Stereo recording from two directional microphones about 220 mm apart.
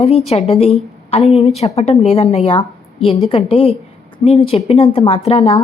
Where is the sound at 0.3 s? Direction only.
30° left (ahead or behind).